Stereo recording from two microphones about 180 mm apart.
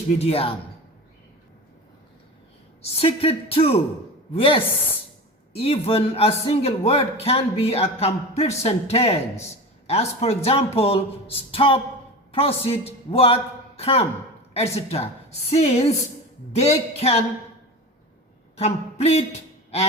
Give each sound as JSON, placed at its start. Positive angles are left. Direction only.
{"t": 0.2, "sound": "a man's voice", "side_deg": 30}
{"t": 2.8, "sound": "a man's voice", "side_deg": 35}
{"t": 18.6, "sound": "speech", "side_deg": 35}